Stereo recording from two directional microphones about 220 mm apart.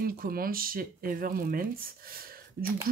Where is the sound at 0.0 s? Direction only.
40° right (ahead or behind).